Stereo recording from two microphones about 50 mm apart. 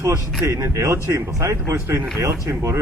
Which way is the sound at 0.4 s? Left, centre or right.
Right.